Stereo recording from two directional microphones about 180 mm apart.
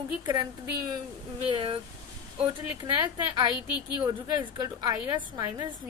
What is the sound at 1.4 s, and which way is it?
Speech, 30° right (ahead or behind).